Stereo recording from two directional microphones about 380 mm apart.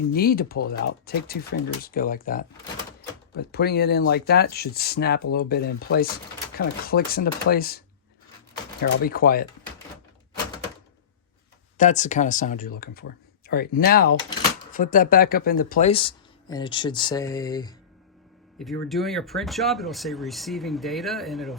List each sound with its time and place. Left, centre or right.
0.1 s speech: left
8.8 s speech: left
11.8 s speech: centre